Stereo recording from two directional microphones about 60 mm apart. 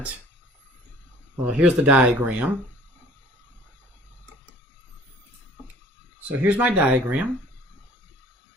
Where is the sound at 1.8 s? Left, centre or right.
Right.